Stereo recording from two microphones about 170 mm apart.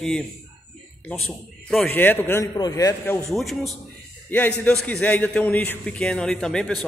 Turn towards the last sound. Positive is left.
turn(degrees=5)  # may be behind; listen again after turning